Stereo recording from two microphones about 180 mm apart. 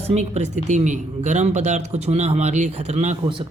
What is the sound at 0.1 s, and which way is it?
Speech, 40° right (ahead or behind).